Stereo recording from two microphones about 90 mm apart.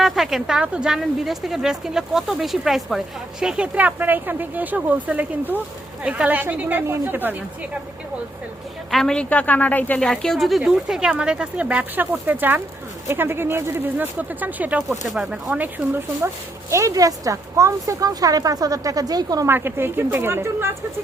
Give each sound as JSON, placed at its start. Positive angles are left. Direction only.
{"t": 0.0, "sound": "speech", "side_deg": -5}
{"t": 8.9, "sound": "a woman's voice", "side_deg": 5}
{"t": 10.0, "sound": "speech", "side_deg": 5}
{"t": 14.8, "sound": "speech", "side_deg": 0}
{"t": 16.2, "sound": "speech", "side_deg": -30}
{"t": 19.5, "sound": "speech", "side_deg": -25}